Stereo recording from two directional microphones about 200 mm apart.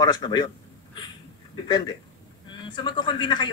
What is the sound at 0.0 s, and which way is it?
Speech, 20° left (ahead or behind).